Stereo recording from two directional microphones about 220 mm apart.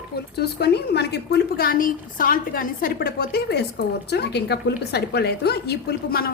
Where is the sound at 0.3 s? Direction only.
45° left (ahead or behind).